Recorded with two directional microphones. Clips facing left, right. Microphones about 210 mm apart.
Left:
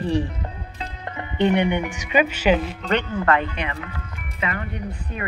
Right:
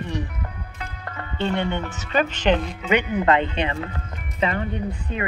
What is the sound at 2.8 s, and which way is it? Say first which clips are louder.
Speech: right 2 dB; 15° right (ahead or behind).